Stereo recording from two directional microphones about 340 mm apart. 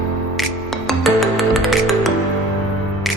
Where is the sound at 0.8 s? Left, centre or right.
Centre.